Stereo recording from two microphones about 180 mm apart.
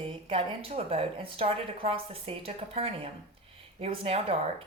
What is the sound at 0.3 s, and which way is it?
A woman's voice, 30° right (ahead or behind).